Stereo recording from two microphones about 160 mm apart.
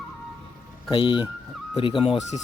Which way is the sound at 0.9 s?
30° left (ahead or behind).